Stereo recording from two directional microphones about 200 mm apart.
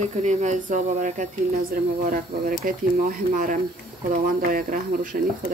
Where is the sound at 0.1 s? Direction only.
35° right (ahead or behind).